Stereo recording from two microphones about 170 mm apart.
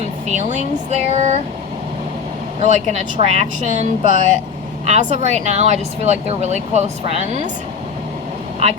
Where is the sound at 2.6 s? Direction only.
45° left (ahead or behind).